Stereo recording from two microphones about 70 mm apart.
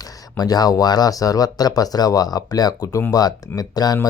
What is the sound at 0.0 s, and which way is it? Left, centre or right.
Speech, left.